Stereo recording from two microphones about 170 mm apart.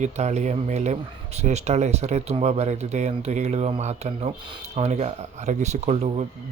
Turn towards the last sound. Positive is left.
turn(degrees=-40)  # may be behind; listen again after turning